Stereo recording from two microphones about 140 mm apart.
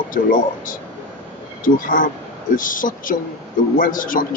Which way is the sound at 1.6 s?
75° left (ahead or behind).